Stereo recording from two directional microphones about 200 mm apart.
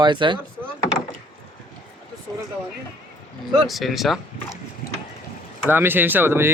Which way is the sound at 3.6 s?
Centre (ahead or behind).